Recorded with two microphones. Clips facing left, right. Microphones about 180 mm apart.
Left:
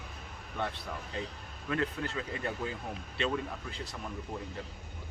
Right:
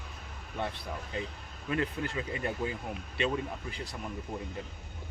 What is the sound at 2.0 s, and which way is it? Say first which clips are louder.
Speech: right 2 dB; 15° right (ahead or behind).